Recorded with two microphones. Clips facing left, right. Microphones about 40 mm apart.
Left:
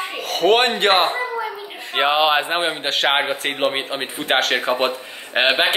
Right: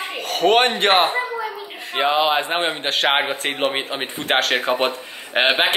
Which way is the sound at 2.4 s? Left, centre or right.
Centre.